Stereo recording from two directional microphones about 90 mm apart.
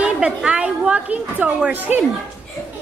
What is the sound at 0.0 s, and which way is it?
A woman's voice, 10° right (ahead or behind).